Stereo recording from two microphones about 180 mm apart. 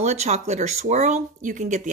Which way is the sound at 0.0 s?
40° right (ahead or behind).